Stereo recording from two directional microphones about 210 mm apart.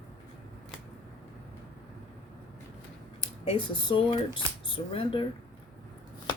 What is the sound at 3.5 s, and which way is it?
Speech, 25° left (ahead or behind).